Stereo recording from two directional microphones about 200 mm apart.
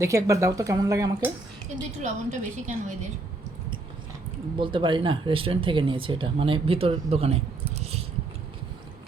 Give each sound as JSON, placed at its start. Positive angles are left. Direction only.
{"t": 0.0, "sound": "speech", "side_deg": -15}
{"t": 1.7, "sound": "a woman's voice", "side_deg": -40}
{"t": 4.5, "sound": "speech", "side_deg": -25}